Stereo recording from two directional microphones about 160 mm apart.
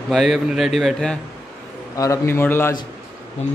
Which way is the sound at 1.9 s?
20° left (ahead or behind).